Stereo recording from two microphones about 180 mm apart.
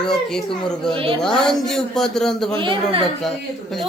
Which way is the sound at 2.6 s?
30° right (ahead or behind).